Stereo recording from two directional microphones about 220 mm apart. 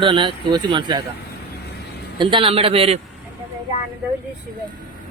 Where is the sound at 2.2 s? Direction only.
25° right (ahead or behind).